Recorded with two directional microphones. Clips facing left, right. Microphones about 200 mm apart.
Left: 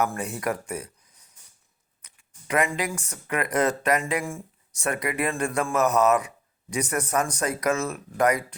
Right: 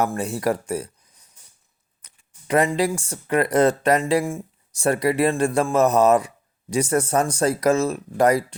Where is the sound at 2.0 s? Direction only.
30° right (ahead or behind).